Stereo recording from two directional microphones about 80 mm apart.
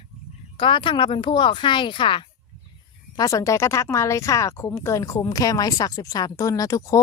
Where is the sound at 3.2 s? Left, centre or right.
Left.